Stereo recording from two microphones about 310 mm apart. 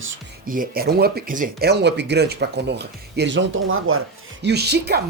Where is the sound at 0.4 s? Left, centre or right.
Right.